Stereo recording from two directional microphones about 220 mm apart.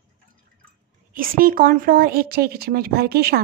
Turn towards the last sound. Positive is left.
turn(degrees=-45)  # may be behind; listen again after turning